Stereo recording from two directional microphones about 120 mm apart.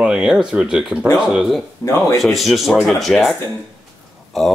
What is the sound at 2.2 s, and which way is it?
Speech, centre (ahead or behind).